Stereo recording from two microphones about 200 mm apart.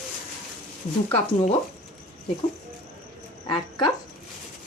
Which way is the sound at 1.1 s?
30° left (ahead or behind).